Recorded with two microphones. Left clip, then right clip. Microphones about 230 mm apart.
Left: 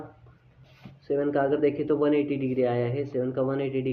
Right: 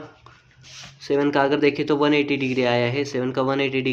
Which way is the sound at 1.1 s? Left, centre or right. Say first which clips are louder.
Right 5 dB; right.